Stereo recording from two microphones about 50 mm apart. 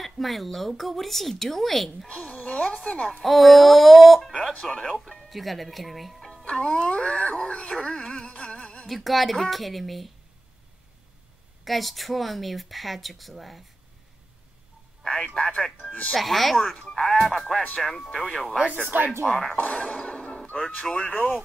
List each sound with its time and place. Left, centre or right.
0.0 s speech: centre
2.0 s speech: left
3.3 s speech: centre
6.4 s speech: left
7.7 s a sound: centre
8.8 s speech: centre
11.6 s speech: centre
15.0 s speech: centre
15.9 s speech: left
16.2 s speech: centre
18.8 s speech: right
19.5 s speech: left
19.8 s a sound: centre
21.1 s speech: left